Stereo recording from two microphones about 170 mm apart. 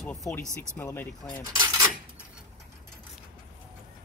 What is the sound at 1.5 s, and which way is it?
Cutlery, 15° right (ahead or behind).